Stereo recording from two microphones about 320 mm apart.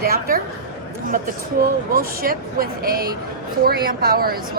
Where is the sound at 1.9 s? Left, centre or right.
Right.